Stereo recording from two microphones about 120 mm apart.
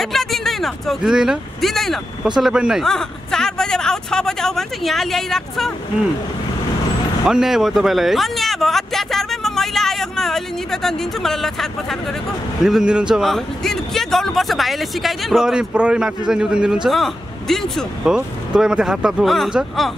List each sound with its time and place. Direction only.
0.0 s speech: centre (ahead or behind)
7.2 s speech: 5° right (ahead or behind)